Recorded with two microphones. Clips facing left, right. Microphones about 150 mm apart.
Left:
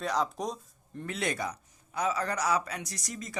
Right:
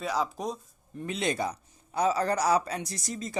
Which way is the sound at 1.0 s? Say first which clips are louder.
Right 3 dB; 20° right (ahead or behind).